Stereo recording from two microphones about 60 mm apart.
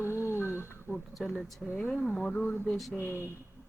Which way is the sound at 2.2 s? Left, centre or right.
Left.